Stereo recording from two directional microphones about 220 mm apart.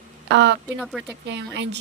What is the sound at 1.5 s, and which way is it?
Speech, 55° right (ahead or behind).